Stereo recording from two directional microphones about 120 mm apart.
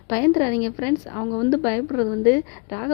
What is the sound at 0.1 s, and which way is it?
Speech, 25° left (ahead or behind).